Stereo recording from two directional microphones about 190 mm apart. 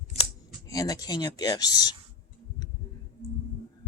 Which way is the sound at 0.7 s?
20° left (ahead or behind).